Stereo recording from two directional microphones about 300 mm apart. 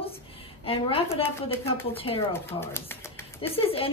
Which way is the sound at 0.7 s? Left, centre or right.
Centre.